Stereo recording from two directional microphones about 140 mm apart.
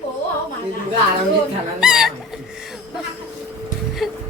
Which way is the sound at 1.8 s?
5° right (ahead or behind).